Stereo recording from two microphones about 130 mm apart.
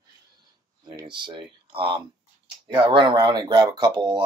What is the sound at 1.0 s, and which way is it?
Speech, 40° right (ahead or behind).